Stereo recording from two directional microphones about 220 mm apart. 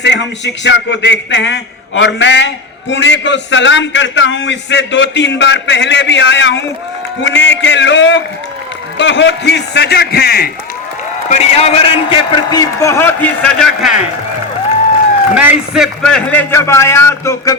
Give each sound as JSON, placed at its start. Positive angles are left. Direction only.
{"t": 0.0, "sound": "a man's voice", "side_deg": 55}
{"t": 11.3, "sound": "a man's voice", "side_deg": 30}
{"t": 15.4, "sound": "a man's voice", "side_deg": -5}